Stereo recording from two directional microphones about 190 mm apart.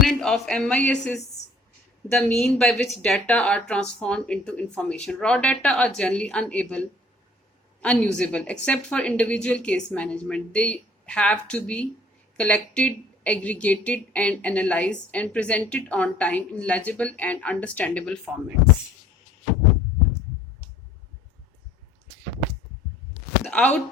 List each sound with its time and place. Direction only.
0.0 s a woman's voice: centre (ahead or behind)
23.5 s speech: 10° left (ahead or behind)